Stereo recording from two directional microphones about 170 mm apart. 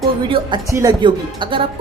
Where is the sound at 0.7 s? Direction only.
20° right (ahead or behind).